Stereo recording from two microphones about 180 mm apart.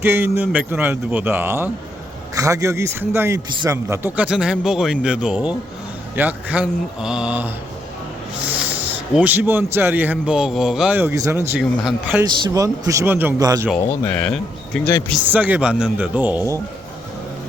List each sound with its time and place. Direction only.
0.0 s a man's voice: 10° right (ahead or behind)
9.1 s a man's voice: 10° right (ahead or behind)
11.8 s speech: 5° right (ahead or behind)
12.2 s speech: 25° right (ahead or behind)
13.7 s speech: 10° left (ahead or behind)
15.3 s a man's voice: 10° right (ahead or behind)